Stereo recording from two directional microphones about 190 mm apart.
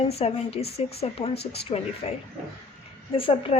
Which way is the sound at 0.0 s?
30° left (ahead or behind).